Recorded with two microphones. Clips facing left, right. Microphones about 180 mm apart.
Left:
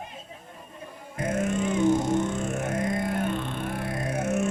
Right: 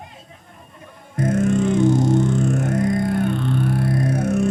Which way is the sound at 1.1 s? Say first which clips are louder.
Right 8 dB; 40° right (ahead or behind).